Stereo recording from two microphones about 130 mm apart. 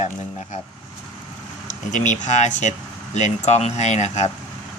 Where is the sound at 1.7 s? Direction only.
70° left (ahead or behind).